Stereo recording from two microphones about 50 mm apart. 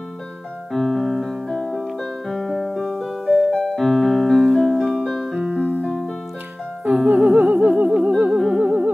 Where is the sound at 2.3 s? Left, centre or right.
Centre.